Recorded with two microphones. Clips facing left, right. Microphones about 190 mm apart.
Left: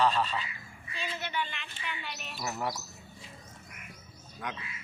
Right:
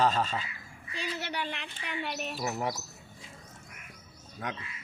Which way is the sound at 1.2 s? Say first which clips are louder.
Even; 75° right (ahead or behind).